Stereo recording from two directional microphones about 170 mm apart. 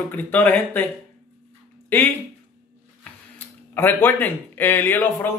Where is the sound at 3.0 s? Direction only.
10° left (ahead or behind).